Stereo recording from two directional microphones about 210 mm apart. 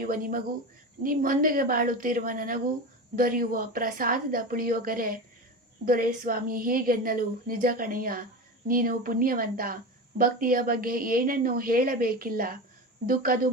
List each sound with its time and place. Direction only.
0.0 s a woman's voice: 40° right (ahead or behind)